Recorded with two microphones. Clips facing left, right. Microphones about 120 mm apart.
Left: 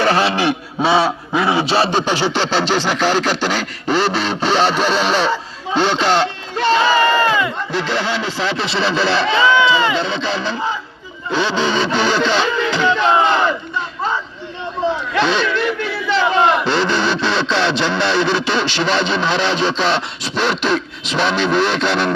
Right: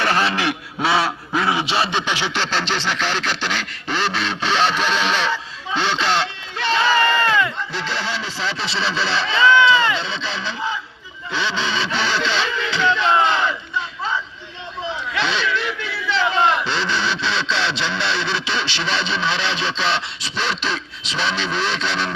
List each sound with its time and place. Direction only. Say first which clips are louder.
0.0 s a man's voice: left 5 dB; 30° left (ahead or behind)
7.1 s crowd: left 4 dB; 40° left (ahead or behind)
7.7 s speech: left 6 dB; 55° left (ahead or behind)
9.4 s speech: right 1 dB; 15° left (ahead or behind)
10.0 s speech: left 7 dB; 50° left (ahead or behind)